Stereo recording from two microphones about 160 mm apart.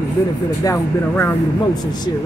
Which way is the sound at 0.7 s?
15° left (ahead or behind).